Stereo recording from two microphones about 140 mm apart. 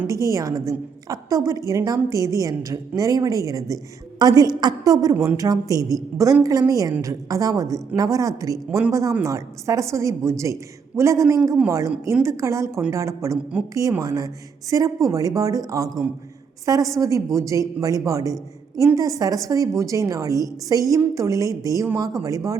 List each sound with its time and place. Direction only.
0.1 s a woman's voice: 25° right (ahead or behind)
5.1 s speech: 15° right (ahead or behind)
5.4 s a woman's voice: 25° right (ahead or behind)